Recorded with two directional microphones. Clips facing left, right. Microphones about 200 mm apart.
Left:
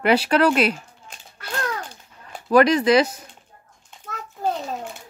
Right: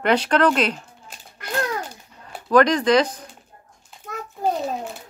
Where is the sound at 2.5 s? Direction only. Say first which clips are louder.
Left 1 dB; 10° left (ahead or behind).